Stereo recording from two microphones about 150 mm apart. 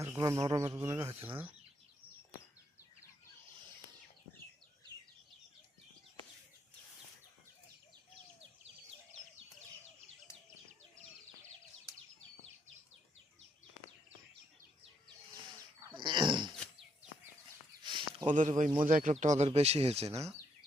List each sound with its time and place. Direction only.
0.2 s speech: 25° right (ahead or behind)
15.8 s dog: 30° right (ahead or behind)
17.8 s a sound: 30° right (ahead or behind)
18.3 s speech: 55° right (ahead or behind)
19.1 s speech: 50° right (ahead or behind)